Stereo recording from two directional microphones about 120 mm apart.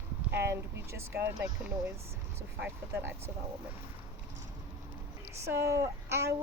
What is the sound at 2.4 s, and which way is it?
Speech, 20° right (ahead or behind).